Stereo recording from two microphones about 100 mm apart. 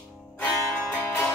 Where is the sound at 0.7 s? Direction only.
20° left (ahead or behind).